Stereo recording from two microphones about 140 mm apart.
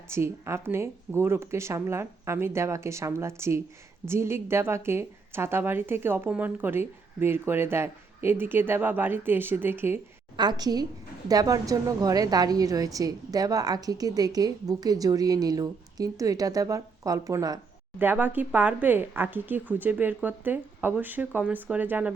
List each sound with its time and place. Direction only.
0.1 s a woman's voice: 20° right (ahead or behind)
10.3 s a woman's voice: 30° right (ahead or behind)
18.0 s a woman's voice: 15° right (ahead or behind)